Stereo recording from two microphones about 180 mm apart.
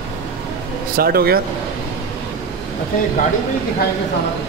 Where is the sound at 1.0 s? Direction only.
55° right (ahead or behind).